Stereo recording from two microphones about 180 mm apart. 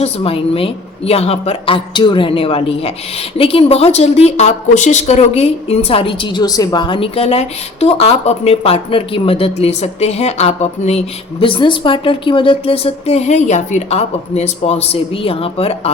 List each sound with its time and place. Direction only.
0.0 s a woman's voice: 30° left (ahead or behind)